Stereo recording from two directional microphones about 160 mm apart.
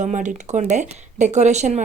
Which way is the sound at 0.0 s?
50° right (ahead or behind).